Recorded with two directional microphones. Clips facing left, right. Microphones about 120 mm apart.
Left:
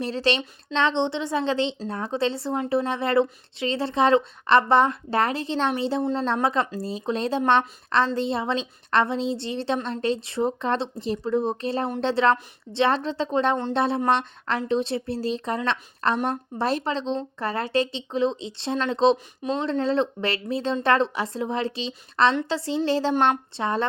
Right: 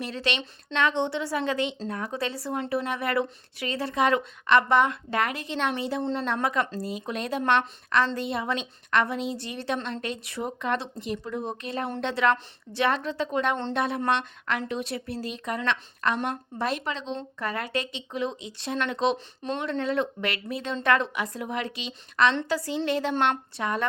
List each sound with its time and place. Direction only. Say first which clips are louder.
0.0 s a woman's voice: left 6 dB; 30° left (ahead or behind)
19.1 s speech: left 4 dB; 10° left (ahead or behind)
19.5 s a woman's voice: left 4 dB; 30° left (ahead or behind)